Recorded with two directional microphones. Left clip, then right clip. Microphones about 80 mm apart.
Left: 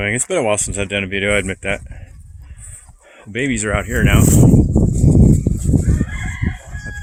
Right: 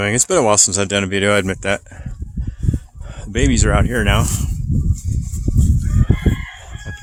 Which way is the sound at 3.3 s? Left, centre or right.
Right.